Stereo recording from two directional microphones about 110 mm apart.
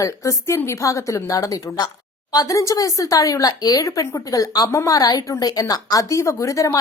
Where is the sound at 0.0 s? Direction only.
30° left (ahead or behind).